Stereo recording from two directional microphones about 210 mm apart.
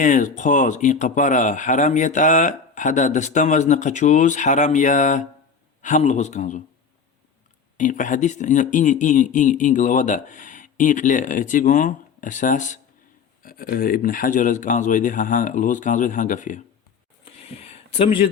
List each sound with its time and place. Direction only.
0.0 s speech: 35° left (ahead or behind)
7.8 s speech: 35° left (ahead or behind)
17.6 s a sound: 30° left (ahead or behind)